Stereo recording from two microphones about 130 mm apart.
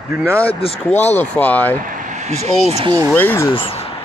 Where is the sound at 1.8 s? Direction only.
90° right; by 2.8 s 55° right (ahead or behind).